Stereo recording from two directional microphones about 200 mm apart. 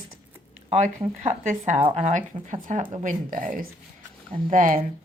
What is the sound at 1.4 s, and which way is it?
Speech, 35° right (ahead or behind).